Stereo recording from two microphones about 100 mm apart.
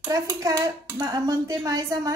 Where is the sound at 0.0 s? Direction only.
35° right (ahead or behind).